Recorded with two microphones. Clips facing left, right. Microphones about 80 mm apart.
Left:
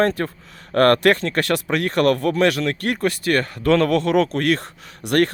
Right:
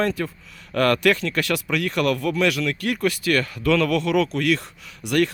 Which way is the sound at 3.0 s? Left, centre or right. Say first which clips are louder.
Even; left.